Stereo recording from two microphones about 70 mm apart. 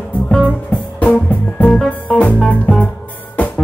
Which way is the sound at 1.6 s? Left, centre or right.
Centre.